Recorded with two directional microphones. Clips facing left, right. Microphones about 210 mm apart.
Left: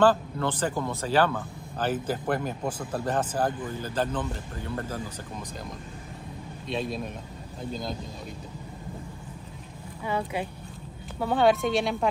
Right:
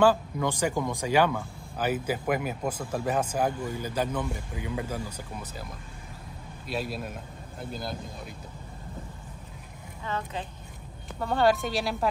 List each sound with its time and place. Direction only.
0.0 s speech: 10° right (ahead or behind)
6.7 s speech: 5° right (ahead or behind)
10.0 s speech: 10° left (ahead or behind)
11.1 s speech: centre (ahead or behind)